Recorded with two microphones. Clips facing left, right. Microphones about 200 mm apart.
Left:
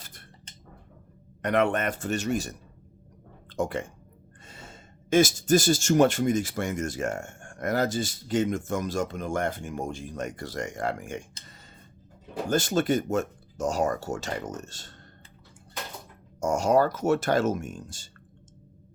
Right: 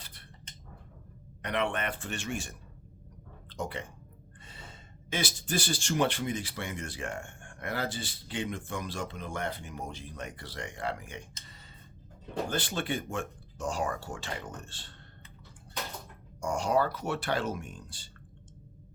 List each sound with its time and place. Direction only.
1.4 s speech: 45° left (ahead or behind)
12.5 s speech: 45° left (ahead or behind)
16.4 s speech: 45° left (ahead or behind)